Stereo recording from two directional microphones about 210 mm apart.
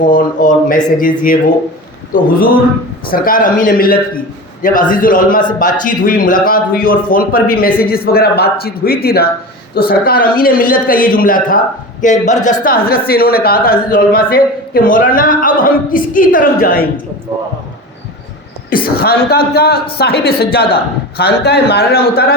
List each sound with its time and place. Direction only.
0.0 s a man's voice: 40° left (ahead or behind)
18.9 s a man's voice: 45° left (ahead or behind)